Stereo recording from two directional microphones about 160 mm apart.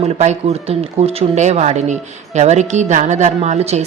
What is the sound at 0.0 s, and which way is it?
Speech, 45° right (ahead or behind).